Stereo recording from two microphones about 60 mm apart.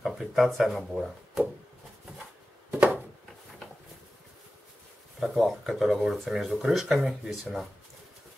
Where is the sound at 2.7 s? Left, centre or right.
Right.